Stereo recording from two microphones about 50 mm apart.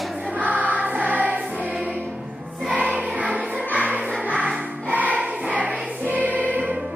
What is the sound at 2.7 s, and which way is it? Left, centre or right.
Music, right.